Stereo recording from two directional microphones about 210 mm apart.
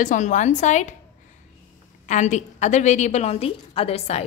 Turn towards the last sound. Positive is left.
turn(degrees=30)  # may be behind; listen again after turning